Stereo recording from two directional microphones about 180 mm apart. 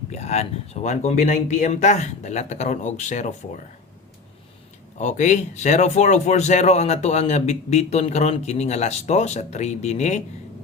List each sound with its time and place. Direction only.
0.1 s a man's voice: 40° left (ahead or behind)
4.9 s a man's voice: 40° left (ahead or behind)